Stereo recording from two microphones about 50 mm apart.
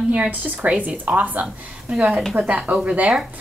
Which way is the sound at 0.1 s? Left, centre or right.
Right.